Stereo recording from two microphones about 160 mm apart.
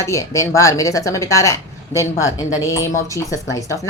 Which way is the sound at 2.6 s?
20° left (ahead or behind).